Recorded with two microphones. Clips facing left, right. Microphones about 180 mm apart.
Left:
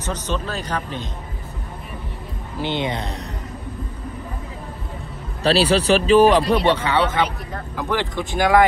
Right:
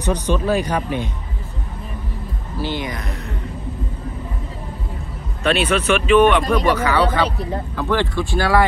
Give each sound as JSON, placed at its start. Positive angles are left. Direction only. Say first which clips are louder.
{"t": 0.0, "sound": "speech", "louder": "right 6 dB", "side_deg": -10}
{"t": 2.6, "sound": "speech", "louder": "left 2 dB", "side_deg": 25}
{"t": 5.4, "sound": "speech", "louder": "left 1 dB", "side_deg": 35}